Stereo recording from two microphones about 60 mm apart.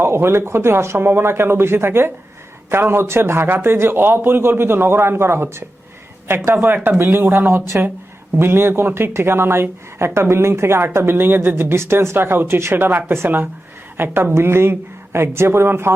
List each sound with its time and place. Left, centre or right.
0.0 s a woman's voice: right